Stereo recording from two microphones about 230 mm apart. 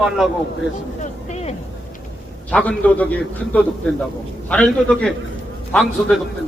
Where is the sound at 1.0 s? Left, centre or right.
Left.